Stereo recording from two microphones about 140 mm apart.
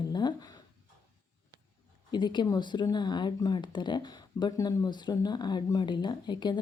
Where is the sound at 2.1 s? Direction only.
30° left (ahead or behind).